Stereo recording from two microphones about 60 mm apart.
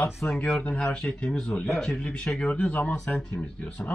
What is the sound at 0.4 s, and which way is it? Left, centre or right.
Speech, left.